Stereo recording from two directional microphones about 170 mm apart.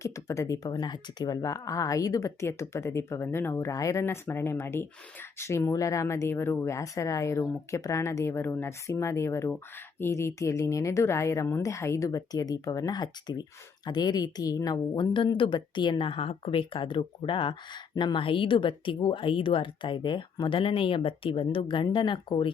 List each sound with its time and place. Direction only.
0.0 s a woman's voice: 20° left (ahead or behind)